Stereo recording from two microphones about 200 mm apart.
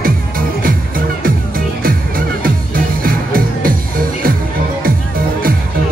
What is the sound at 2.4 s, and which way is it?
Music, 45° right (ahead or behind).